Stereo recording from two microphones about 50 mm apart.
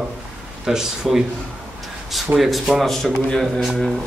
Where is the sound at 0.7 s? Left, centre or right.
Centre.